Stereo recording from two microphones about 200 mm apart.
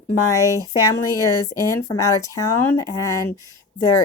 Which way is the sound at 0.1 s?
15° left (ahead or behind).